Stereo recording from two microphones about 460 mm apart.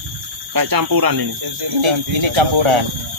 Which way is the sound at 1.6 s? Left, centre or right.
Right.